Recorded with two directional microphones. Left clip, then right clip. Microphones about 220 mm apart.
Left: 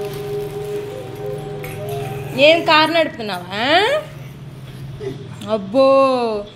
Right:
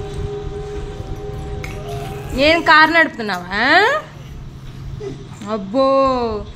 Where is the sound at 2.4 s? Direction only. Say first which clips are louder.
Right 1 dB; 30° right (ahead or behind).